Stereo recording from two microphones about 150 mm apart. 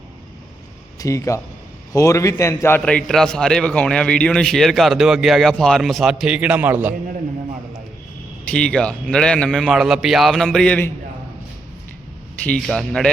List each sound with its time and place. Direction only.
0.9 s a man's voice: 20° left (ahead or behind); by 6.9 s 10° right (ahead or behind)
8.4 s a man's voice: 5° left (ahead or behind)
12.4 s a man's voice: 5° left (ahead or behind)